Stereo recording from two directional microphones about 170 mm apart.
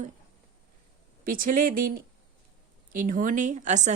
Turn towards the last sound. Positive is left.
turn(degrees=-45)  # may be behind; listen again after turning